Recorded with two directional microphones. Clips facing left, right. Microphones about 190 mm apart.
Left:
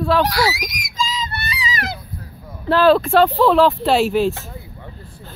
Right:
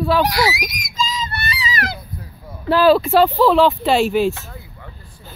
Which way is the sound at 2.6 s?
5° right (ahead or behind).